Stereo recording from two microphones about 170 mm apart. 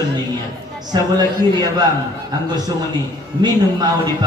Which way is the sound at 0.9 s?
25° right (ahead or behind).